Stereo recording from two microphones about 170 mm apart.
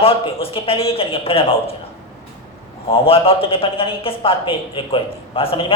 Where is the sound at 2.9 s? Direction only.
35° left (ahead or behind).